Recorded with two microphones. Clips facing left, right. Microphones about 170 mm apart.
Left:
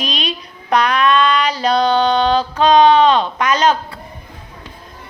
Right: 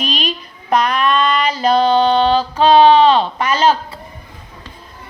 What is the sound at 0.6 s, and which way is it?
Speech, 5° right (ahead or behind).